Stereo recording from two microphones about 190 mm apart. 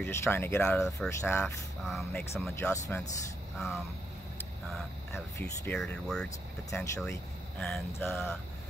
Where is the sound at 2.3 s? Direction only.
15° left (ahead or behind).